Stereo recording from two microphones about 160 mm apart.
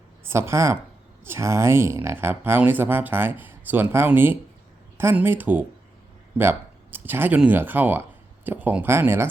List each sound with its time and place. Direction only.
0.3 s speech: 15° right (ahead or behind)